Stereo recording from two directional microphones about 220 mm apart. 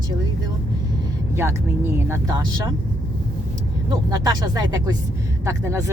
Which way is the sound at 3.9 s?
15° right (ahead or behind).